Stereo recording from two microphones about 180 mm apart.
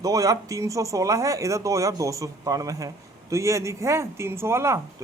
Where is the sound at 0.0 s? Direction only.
20° right (ahead or behind).